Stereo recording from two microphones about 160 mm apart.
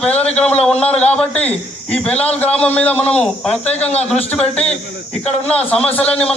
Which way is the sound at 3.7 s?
40° left (ahead or behind).